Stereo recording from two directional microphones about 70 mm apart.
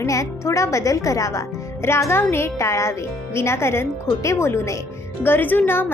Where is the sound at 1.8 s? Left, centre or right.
Left.